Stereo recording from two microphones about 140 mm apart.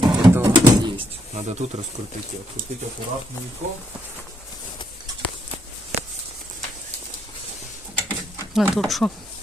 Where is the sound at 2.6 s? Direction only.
80° right.